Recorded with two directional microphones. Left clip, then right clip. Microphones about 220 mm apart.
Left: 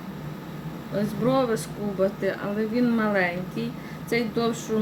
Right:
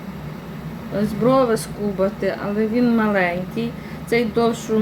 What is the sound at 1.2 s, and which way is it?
A woman's voice, centre (ahead or behind).